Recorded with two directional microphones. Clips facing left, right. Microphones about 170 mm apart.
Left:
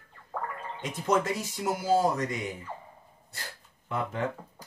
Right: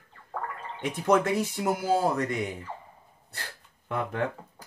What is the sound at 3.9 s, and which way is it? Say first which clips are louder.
Speech: right 2 dB; 60° right (ahead or behind).